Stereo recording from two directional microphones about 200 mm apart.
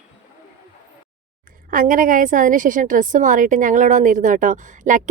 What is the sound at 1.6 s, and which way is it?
A woman's voice, 45° right (ahead or behind).